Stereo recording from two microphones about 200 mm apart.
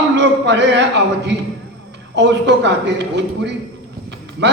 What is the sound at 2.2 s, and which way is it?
Speech, 60° right (ahead or behind).